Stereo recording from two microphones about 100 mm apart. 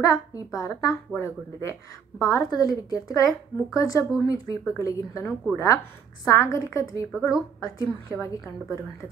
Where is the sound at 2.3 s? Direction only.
40° left (ahead or behind).